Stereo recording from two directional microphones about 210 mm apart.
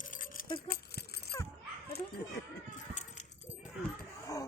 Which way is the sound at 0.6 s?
50° left (ahead or behind).